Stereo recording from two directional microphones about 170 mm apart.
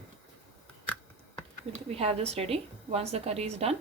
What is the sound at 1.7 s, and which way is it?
A woman's voice, 35° right (ahead or behind).